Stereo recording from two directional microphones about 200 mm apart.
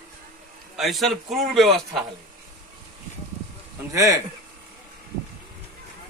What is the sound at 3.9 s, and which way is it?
Speech, 15° right (ahead or behind).